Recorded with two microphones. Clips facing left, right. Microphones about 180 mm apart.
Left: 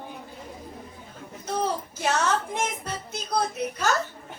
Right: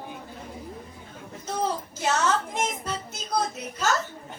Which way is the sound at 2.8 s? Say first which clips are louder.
Even; 60° left (ahead or behind).